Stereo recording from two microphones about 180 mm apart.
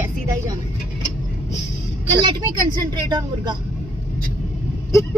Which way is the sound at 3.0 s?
25° right (ahead or behind).